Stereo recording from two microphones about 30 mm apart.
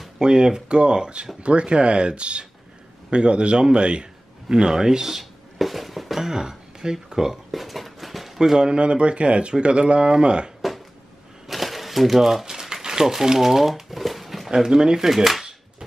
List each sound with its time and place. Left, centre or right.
0.2 s speech: right
1.4 s a man's voice: right
5.1 s a sound: centre
6.1 s speech: centre
7.5 s a sound: centre
8.4 s speech: right
11.4 s crumpling: centre
13.0 s speech: centre
14.5 s speech: right
15.0 s speech: centre